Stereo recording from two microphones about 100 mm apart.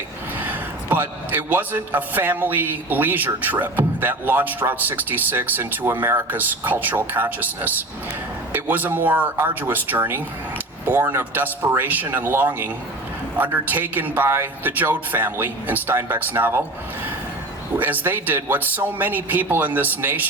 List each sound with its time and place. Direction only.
0.3 s a man's voice: 20° right (ahead or behind)
17.7 s a man's voice: 15° right (ahead or behind)